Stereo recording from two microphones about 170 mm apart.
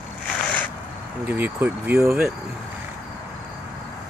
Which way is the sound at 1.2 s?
10° right (ahead or behind).